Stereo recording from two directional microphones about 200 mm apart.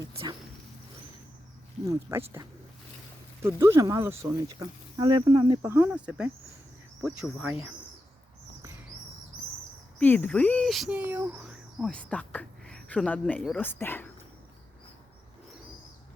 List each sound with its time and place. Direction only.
0.0 s a sound: 20° right (ahead or behind)
1.9 s speech: 15° right (ahead or behind)
5.6 s speech: 10° right (ahead or behind)
10.0 s speech: 10° left (ahead or behind)